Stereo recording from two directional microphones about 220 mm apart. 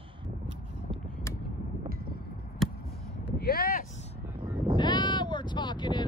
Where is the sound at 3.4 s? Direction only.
45° left (ahead or behind).